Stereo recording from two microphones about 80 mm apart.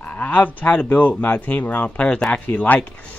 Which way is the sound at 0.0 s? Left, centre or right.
Left.